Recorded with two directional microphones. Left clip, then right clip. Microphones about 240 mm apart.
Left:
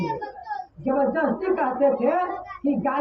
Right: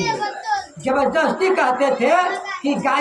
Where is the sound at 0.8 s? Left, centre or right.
Right.